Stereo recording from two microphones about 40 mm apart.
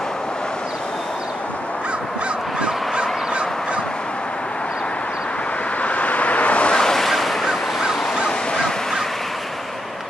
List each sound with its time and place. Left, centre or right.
2.6 s fowl: right
5.8 s vehicle: left
6.7 s waves: centre
8.3 s honk: centre